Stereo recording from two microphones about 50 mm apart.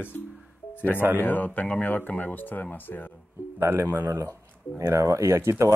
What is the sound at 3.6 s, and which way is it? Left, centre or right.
Speech, right.